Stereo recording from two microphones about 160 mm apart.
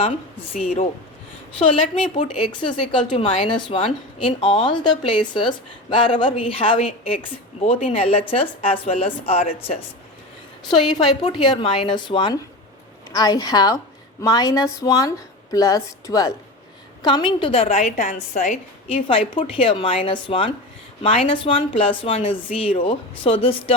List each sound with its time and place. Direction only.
0.5 s speech: 50° left (ahead or behind)
1.5 s a woman's voice: 35° left (ahead or behind)
10.7 s a woman's voice: 25° left (ahead or behind)